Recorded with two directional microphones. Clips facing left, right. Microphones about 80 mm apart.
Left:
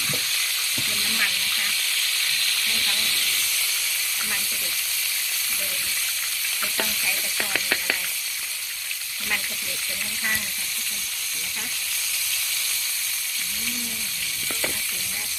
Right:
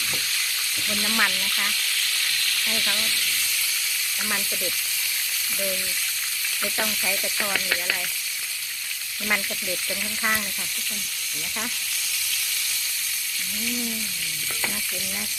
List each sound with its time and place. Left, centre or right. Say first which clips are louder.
1.0 s speech: right 5 dB; right